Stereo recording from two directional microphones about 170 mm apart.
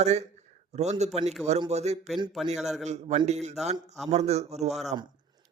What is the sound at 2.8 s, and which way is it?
Speech, 40° right (ahead or behind).